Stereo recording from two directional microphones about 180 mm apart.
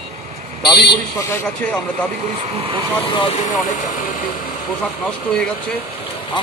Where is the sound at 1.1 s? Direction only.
10° left (ahead or behind).